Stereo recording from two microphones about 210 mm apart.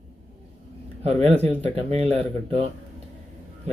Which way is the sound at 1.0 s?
30° right (ahead or behind).